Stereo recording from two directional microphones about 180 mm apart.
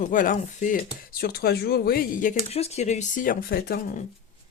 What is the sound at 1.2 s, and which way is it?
Speech, 60° left (ahead or behind).